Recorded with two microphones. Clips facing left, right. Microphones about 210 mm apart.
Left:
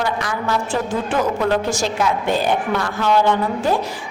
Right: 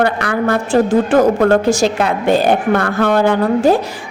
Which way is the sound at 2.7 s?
60° right (ahead or behind).